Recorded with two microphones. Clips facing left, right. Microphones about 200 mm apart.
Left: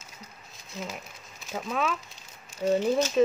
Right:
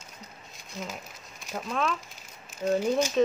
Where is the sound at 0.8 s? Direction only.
Centre (ahead or behind).